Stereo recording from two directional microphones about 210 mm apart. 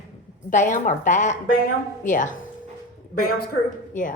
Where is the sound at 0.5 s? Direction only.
35° left (ahead or behind).